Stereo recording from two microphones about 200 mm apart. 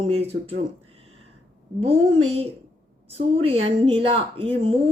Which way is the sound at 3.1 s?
30° right (ahead or behind).